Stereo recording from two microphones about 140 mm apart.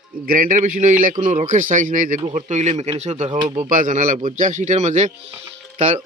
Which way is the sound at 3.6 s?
65° right (ahead or behind).